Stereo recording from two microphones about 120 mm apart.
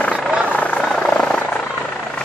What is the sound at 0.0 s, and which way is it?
Helicopter, 10° left (ahead or behind).